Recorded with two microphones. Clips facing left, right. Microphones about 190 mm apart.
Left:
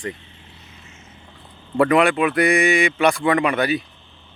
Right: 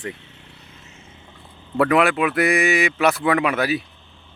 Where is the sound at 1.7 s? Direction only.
Centre (ahead or behind).